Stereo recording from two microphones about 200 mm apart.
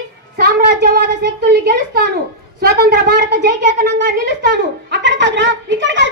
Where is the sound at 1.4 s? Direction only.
50° right (ahead or behind).